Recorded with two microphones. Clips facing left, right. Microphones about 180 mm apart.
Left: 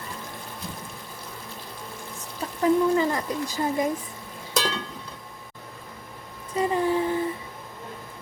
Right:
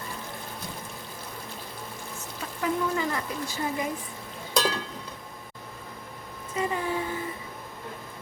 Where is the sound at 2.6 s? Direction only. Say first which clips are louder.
Left 7 dB; 35° left (ahead or behind).